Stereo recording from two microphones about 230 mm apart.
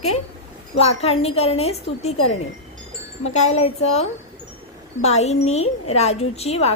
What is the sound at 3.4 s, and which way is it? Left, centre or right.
A woman's voice, left.